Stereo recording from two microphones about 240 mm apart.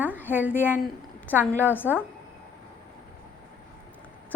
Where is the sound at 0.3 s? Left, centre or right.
Centre.